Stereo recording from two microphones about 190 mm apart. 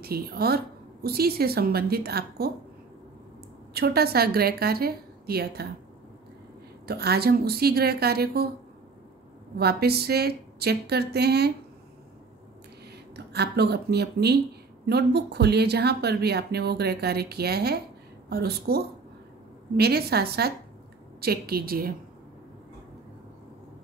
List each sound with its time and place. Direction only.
0.0 s a woman's voice: 55° right (ahead or behind)
3.7 s speech: 55° right (ahead or behind)
6.9 s speech: 55° right (ahead or behind)
9.6 s speech: 55° right (ahead or behind)
13.1 s speech: 60° right (ahead or behind)
19.8 s a woman's voice: 55° right (ahead or behind)